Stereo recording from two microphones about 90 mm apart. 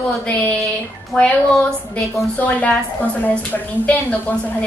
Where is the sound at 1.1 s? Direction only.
15° left (ahead or behind).